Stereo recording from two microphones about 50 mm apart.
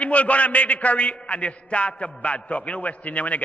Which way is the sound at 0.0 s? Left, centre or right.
Left.